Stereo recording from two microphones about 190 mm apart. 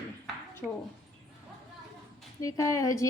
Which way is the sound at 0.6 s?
Centre (ahead or behind).